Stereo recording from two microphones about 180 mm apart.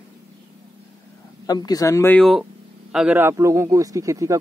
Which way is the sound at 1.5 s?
20° left (ahead or behind).